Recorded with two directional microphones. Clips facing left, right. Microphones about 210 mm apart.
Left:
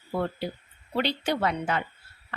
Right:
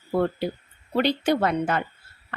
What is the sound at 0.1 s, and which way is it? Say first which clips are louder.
A woman's voice: right 6 dB; 50° right (ahead or behind).